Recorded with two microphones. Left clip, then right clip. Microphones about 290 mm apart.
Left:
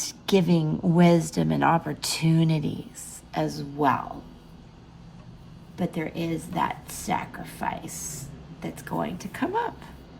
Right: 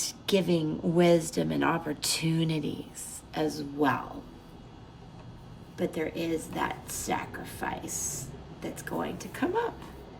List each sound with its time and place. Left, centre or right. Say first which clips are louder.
0.0 s a woman's voice: left 4 dB; centre
5.7 s speech: even; left